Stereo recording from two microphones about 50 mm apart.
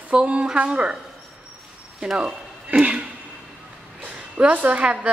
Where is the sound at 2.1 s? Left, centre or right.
Centre.